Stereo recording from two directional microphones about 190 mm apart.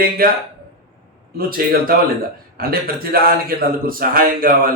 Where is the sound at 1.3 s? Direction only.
50° right (ahead or behind).